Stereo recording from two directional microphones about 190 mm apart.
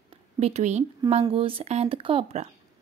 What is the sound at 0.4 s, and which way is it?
A woman's voice, 35° right (ahead or behind).